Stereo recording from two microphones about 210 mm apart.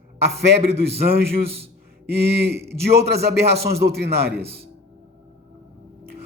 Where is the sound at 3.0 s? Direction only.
50° right (ahead or behind).